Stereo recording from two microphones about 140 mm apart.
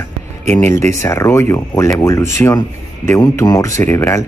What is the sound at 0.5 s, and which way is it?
Speech, 15° left (ahead or behind).